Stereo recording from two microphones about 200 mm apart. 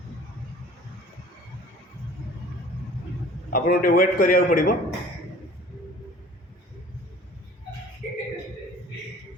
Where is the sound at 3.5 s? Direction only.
45° left (ahead or behind).